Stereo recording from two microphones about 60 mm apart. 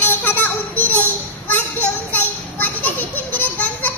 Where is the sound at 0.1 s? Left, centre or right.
Left.